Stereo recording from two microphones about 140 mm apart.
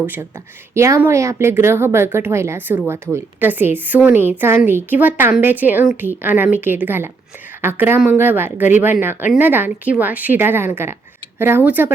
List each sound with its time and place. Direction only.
0.0 s a woman's voice: 10° right (ahead or behind)